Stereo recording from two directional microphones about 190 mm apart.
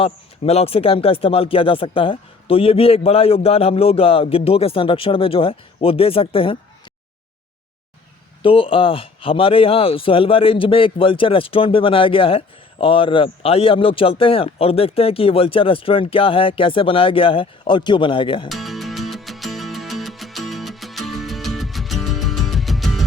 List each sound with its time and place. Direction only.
0.0 s speech: 30° left (ahead or behind)
8.4 s speech: 30° left (ahead or behind)
18.4 s music: centre (ahead or behind)